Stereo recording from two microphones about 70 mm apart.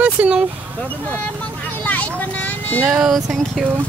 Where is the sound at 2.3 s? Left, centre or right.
Left.